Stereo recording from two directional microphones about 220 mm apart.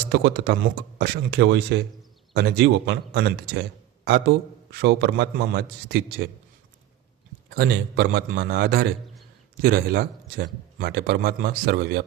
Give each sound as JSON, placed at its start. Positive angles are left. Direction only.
{"t": 0.1, "sound": "a man's voice", "side_deg": -45}
{"t": 7.5, "sound": "a man's voice", "side_deg": -45}